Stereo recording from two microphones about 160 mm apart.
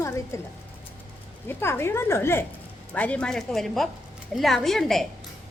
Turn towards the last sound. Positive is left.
turn(degrees=0)  # may be behind; listen again after turning